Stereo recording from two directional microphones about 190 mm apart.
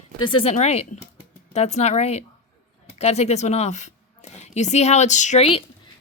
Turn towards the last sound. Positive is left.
turn(degrees=30)  # may be behind; listen again after turning